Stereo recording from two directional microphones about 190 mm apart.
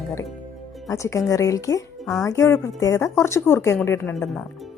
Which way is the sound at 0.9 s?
15° left (ahead or behind).